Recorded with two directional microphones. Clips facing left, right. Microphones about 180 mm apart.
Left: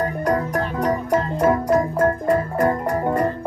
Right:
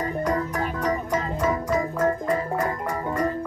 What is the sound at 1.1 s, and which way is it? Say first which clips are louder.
Music: left 6 dB; 60° left (ahead or behind).